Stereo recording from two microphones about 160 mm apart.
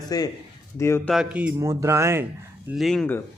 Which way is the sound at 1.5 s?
20° right (ahead or behind).